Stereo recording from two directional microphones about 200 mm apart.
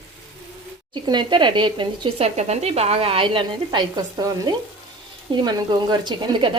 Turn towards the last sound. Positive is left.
turn(degrees=-20)  # may be behind; listen again after turning